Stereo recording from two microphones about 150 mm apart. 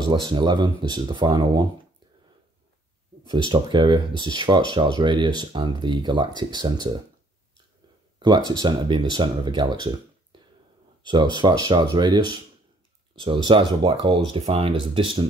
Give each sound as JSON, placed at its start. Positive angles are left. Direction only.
{"t": 0.0, "sound": "speech", "side_deg": -30}
{"t": 3.3, "sound": "speech", "side_deg": -35}
{"t": 8.2, "sound": "speech", "side_deg": -30}
{"t": 10.3, "sound": "a sound", "side_deg": -30}
{"t": 11.1, "sound": "speech", "side_deg": -30}